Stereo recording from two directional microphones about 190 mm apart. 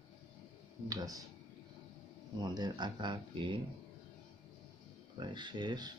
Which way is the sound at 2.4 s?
20° right (ahead or behind).